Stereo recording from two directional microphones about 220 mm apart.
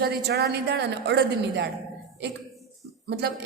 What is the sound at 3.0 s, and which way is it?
Speech, 50° right (ahead or behind).